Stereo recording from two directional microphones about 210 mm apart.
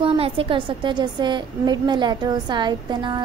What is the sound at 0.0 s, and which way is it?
A woman's voice, 25° right (ahead or behind).